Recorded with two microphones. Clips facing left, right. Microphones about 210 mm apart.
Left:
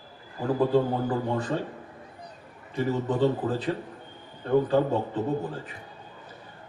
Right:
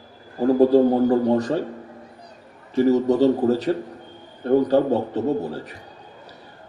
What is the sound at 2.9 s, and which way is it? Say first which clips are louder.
A man's voice: right 7 dB; 40° right (ahead or behind).